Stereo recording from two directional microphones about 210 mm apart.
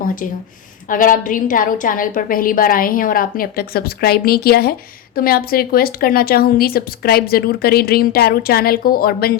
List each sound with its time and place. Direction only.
0.9 s a woman's voice: 40° left (ahead or behind)